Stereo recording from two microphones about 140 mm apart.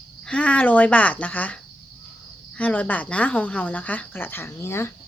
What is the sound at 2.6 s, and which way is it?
Speech, 10° left (ahead or behind).